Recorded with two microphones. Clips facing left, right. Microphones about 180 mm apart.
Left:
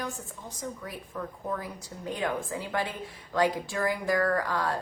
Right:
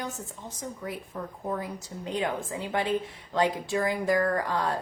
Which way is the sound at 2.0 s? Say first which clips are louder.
Right 1 dB; 20° right (ahead or behind).